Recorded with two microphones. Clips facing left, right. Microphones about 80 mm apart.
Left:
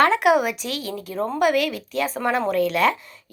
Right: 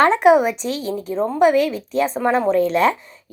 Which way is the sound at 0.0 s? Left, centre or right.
Right.